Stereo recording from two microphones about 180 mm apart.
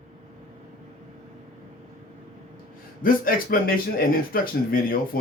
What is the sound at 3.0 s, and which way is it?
Speech, 50° left (ahead or behind).